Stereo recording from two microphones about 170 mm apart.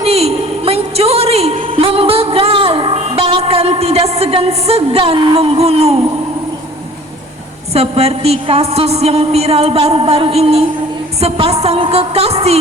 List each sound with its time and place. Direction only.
0.0 s a woman's voice: 35° right (ahead or behind)
7.7 s a woman's voice: 35° right (ahead or behind)